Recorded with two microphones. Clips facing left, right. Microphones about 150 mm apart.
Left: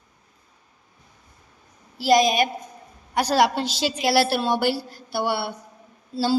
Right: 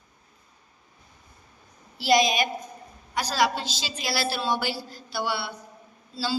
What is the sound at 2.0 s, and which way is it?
A woman's voice, 45° left (ahead or behind).